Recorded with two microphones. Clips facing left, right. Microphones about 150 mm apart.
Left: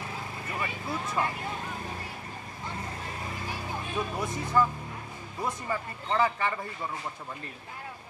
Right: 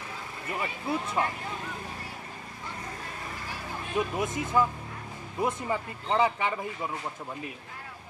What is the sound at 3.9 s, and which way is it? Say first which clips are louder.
Speech: right 4 dB; 20° right (ahead or behind).